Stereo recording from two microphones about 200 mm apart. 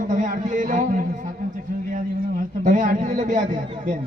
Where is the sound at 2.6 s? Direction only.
40° right (ahead or behind).